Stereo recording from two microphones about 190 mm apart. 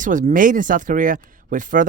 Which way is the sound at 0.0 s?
40° right (ahead or behind).